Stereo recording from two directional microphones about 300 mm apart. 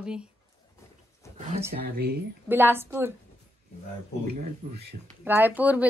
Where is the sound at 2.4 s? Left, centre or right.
Centre.